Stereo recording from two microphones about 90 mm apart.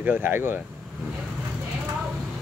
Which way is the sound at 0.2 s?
25° right (ahead or behind).